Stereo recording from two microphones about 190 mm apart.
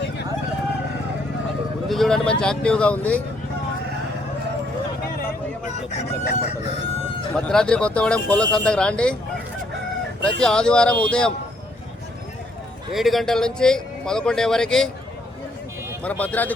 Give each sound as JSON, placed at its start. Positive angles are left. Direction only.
{"t": 1.9, "sound": "speech", "side_deg": 0}
{"t": 5.9, "sound": "crowing", "side_deg": 35}
{"t": 7.3, "sound": "a man's voice", "side_deg": 5}
{"t": 10.4, "sound": "a man's voice", "side_deg": 5}
{"t": 12.9, "sound": "a man's voice", "side_deg": 0}
{"t": 16.0, "sound": "speech", "side_deg": 10}